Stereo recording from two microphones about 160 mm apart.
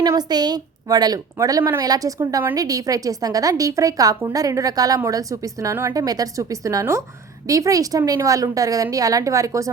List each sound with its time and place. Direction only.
0.0 s a woman's voice: 25° right (ahead or behind)